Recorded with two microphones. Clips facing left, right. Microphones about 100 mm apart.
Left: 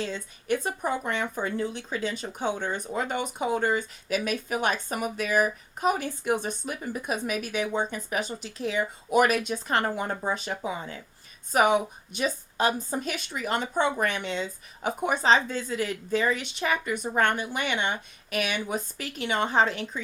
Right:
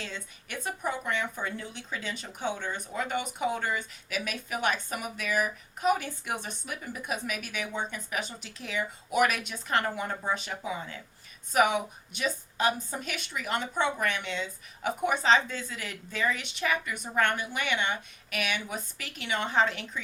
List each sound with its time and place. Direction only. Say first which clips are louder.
0.0 s speech: left 7 dB; 35° left (ahead or behind)